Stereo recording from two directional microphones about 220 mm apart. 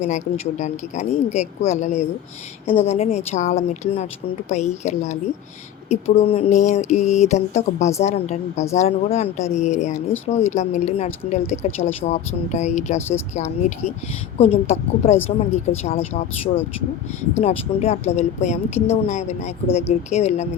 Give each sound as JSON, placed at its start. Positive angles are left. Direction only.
{"t": 0.6, "sound": "speech", "side_deg": 30}